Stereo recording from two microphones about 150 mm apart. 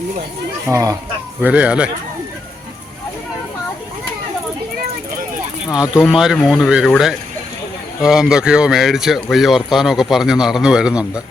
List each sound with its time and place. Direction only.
0.7 s speech: 20° right (ahead or behind)
1.4 s speech: 10° right (ahead or behind)
5.7 s speech: 5° right (ahead or behind)